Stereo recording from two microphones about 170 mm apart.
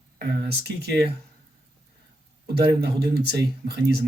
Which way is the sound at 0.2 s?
70° right (ahead or behind).